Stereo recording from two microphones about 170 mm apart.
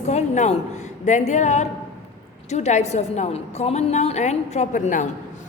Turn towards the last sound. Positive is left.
turn(degrees=50)  # may be behind; listen again after turning